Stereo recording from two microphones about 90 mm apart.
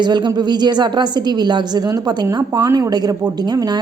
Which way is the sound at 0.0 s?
55° right (ahead or behind).